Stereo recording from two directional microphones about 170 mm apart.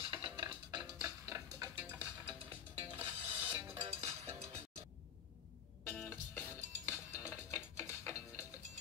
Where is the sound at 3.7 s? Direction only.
35° right (ahead or behind).